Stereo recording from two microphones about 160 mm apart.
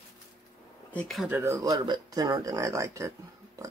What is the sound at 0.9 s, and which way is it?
Speech, centre (ahead or behind).